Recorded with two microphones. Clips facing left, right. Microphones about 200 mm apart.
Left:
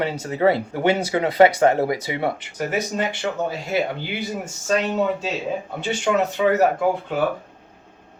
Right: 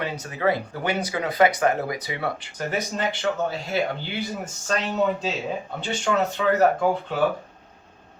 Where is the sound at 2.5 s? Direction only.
10° left (ahead or behind).